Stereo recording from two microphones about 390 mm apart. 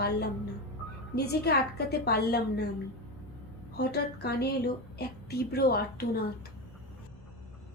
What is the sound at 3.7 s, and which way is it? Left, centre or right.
A woman's voice, left.